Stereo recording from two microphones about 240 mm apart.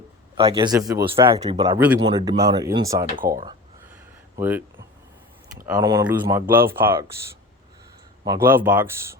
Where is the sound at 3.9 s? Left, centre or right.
Centre.